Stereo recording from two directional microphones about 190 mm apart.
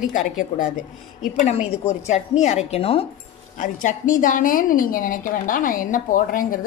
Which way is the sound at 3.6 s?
45° left (ahead or behind).